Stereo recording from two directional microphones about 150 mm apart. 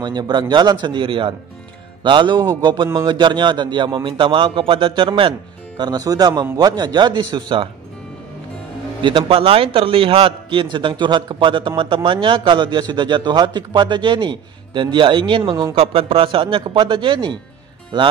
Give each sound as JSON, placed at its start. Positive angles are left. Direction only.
{"t": 0.0, "sound": "a man's voice", "side_deg": -30}
{"t": 9.0, "sound": "a man's voice", "side_deg": -35}